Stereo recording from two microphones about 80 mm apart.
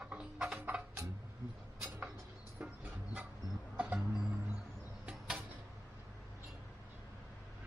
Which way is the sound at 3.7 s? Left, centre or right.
Centre.